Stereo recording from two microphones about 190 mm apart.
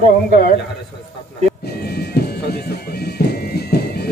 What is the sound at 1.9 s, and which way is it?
Music, 55° left (ahead or behind).